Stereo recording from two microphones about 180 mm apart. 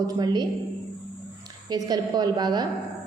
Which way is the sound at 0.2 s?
20° right (ahead or behind).